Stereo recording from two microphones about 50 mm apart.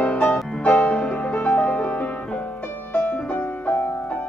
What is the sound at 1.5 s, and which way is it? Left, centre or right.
Music, left.